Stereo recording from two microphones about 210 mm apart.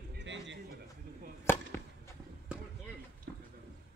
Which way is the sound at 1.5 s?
10° left (ahead or behind).